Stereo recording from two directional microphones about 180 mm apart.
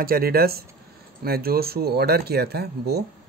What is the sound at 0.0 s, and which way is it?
Speech, 55° right (ahead or behind).